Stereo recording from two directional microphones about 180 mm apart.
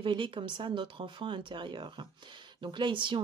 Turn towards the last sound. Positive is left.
turn(degrees=-25)  # may be behind; listen again after turning